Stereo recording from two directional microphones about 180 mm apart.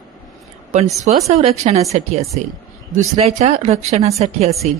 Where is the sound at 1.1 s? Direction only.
35° right (ahead or behind).